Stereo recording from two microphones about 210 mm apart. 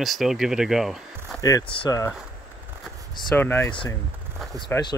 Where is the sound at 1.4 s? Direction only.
20° left (ahead or behind).